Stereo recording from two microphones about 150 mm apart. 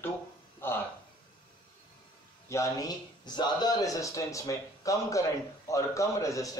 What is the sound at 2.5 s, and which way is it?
A man's voice, 20° left (ahead or behind).